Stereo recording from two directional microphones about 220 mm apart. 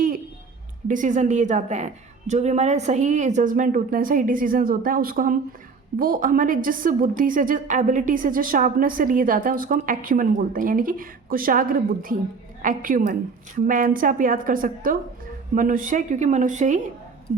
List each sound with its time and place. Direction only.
0.9 s a woman's voice: 35° right (ahead or behind)